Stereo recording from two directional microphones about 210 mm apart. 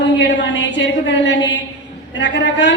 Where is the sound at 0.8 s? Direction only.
60° left (ahead or behind).